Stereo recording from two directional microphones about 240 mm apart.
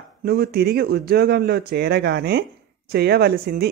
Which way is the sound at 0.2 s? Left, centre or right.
Right.